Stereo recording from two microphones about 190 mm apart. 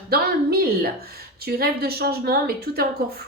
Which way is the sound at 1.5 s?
55° right (ahead or behind).